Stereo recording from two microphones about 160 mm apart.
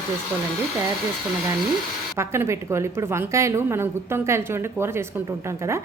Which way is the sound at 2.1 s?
15° right (ahead or behind).